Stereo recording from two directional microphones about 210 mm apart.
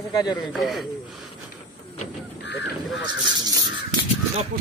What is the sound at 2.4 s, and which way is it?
Goose, 55° left (ahead or behind).